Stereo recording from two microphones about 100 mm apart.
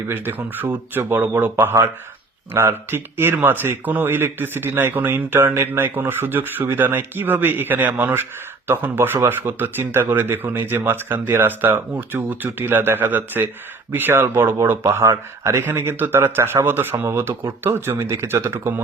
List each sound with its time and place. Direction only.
0.1 s speech: 20° right (ahead or behind)